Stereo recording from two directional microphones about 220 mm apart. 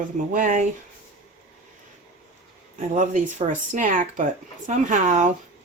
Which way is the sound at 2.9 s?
35° right (ahead or behind).